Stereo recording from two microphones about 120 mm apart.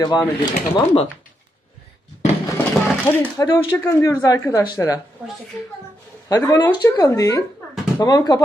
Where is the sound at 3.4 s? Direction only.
25° left (ahead or behind).